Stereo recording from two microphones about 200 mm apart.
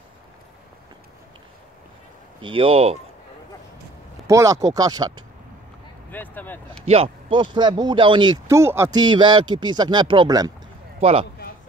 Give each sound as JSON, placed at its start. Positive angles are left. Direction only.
{"t": 2.4, "sound": "speech", "side_deg": -25}
{"t": 4.3, "sound": "speech", "side_deg": -15}
{"t": 6.1, "sound": "speech", "side_deg": 10}
{"t": 6.9, "sound": "speech", "side_deg": -25}
{"t": 11.0, "sound": "a man's voice", "side_deg": -30}